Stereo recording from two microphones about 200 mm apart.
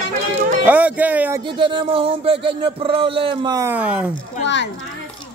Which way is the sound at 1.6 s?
25° right (ahead or behind).